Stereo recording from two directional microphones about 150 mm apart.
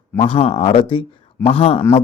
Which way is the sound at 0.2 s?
40° left (ahead or behind).